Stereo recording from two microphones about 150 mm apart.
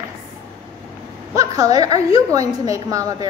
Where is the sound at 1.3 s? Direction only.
25° right (ahead or behind).